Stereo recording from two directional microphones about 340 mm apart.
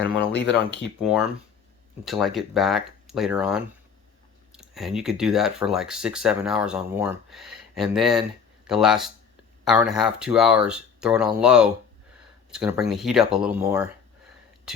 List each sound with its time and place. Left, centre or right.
0.0 s speech: left
1.0 s speech: centre